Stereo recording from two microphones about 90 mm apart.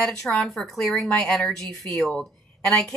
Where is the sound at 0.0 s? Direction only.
5° left (ahead or behind).